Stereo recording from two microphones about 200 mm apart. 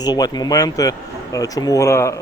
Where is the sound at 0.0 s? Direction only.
20° left (ahead or behind).